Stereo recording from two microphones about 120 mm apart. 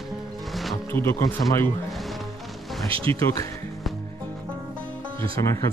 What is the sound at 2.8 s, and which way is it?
Speech, 50° right (ahead or behind).